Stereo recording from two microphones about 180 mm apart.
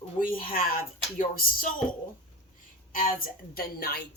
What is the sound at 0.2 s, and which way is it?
Speech, 50° left (ahead or behind).